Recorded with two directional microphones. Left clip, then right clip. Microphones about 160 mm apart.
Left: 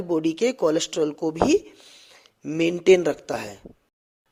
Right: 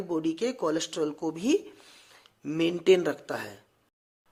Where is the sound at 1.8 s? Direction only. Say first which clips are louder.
Left 5 dB; 20° left (ahead or behind).